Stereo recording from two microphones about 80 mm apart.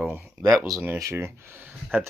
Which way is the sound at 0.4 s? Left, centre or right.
Right.